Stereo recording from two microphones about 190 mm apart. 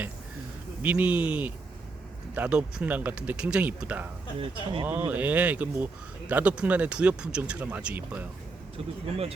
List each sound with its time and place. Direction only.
0.8 s speech: 5° right (ahead or behind)
4.4 s speech: 30° right (ahead or behind)
4.9 s speech: 10° right (ahead or behind)